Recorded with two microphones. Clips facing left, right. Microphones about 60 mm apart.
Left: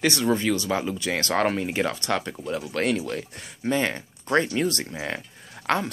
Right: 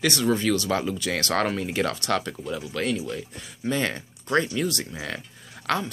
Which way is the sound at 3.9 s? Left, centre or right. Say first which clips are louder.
Left 1 dB; left.